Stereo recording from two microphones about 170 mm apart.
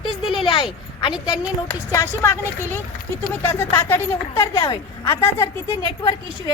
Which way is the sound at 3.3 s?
10° left (ahead or behind).